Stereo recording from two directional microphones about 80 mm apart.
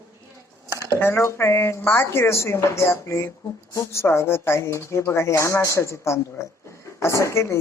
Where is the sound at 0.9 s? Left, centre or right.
Left.